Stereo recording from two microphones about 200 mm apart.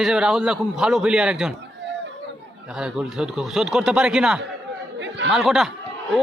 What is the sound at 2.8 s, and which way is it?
A man's voice, 5° right (ahead or behind).